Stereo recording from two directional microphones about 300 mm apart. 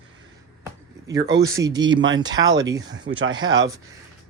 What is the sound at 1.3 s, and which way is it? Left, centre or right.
Speech, centre.